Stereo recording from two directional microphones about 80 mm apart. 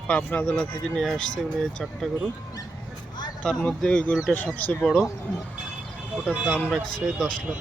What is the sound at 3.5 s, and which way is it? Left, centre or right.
Speech, centre.